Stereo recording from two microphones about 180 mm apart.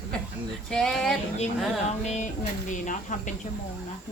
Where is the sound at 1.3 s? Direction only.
40° left (ahead or behind).